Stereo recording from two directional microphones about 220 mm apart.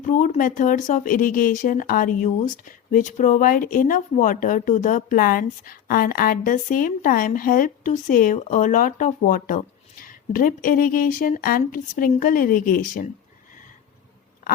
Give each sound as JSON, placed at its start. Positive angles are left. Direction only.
{"t": 0.0, "sound": "speech", "side_deg": 35}